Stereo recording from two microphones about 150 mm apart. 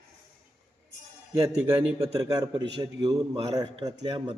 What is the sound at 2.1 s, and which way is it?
A man's voice, 25° right (ahead or behind).